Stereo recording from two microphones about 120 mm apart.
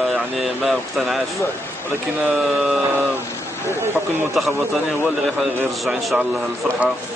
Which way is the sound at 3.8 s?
20° right (ahead or behind).